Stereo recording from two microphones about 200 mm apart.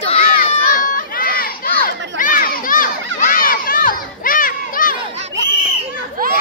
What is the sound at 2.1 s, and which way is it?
Children shouting, 45° left (ahead or behind).